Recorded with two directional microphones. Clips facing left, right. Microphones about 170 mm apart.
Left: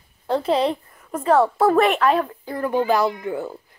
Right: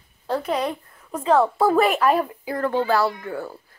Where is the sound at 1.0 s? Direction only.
5° left (ahead or behind); by 2.6 s 10° right (ahead or behind).